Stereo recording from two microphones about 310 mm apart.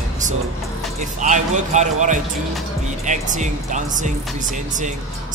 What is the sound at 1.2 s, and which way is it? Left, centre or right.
Speech, right.